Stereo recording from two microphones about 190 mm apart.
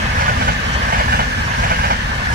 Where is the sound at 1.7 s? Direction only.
50° right (ahead or behind).